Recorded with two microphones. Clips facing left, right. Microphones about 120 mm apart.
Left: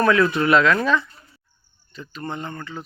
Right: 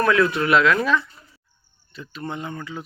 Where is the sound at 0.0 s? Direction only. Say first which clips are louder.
Left 1 dB; centre (ahead or behind).